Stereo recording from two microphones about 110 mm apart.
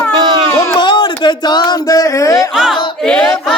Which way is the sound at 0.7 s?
45° left (ahead or behind).